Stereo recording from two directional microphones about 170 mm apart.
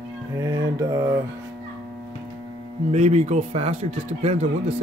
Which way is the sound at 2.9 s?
40° right (ahead or behind).